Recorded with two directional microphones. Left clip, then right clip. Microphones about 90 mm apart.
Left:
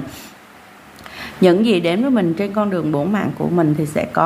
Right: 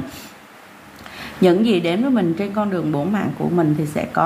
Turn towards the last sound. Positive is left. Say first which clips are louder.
# left 2 dB
turn(degrees=30)  # may be behind; listen again after turning